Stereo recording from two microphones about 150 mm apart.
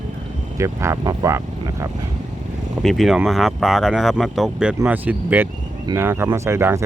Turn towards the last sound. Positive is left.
turn(degrees=-15)  # may be behind; listen again after turning